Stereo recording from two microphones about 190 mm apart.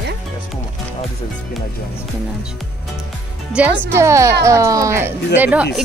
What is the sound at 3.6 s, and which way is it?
Speech, 5° right (ahead or behind).